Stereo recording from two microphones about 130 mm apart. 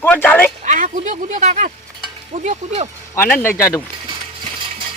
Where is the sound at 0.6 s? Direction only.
70° right (ahead or behind).